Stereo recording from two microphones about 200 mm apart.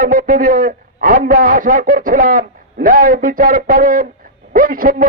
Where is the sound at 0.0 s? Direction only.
40° right (ahead or behind).